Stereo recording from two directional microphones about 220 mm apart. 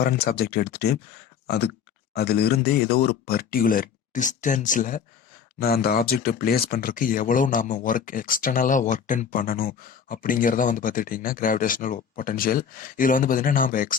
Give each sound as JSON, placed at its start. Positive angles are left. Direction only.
{"t": 0.0, "sound": "speech", "side_deg": 45}